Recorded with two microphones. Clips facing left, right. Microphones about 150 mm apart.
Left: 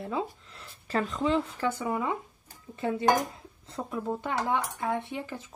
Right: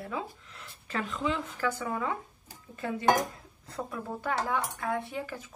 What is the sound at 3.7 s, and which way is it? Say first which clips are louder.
Speech: left 4 dB; 20° left (ahead or behind).